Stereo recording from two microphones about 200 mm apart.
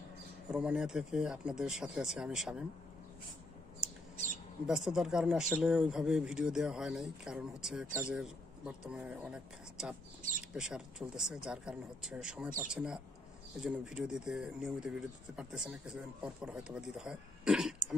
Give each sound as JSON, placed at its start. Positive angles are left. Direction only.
{"t": 0.5, "sound": "a man's voice", "side_deg": -5}
{"t": 4.6, "sound": "a man's voice", "side_deg": 0}